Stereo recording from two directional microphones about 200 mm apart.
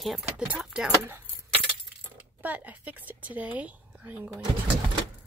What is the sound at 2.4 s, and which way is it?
A woman's voice, 10° right (ahead or behind).